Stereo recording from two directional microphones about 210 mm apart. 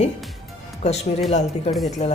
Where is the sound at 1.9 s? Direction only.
35° left (ahead or behind).